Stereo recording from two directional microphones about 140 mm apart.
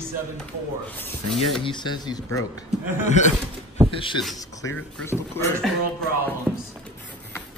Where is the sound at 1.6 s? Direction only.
35° left (ahead or behind).